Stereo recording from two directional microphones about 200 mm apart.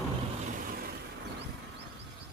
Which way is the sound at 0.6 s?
50° right (ahead or behind).